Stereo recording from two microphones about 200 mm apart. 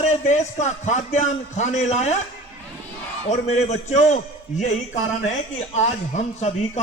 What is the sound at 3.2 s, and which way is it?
A man's voice, 35° left (ahead or behind).